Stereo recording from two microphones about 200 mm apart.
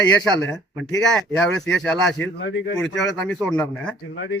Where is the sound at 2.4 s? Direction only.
65° left (ahead or behind).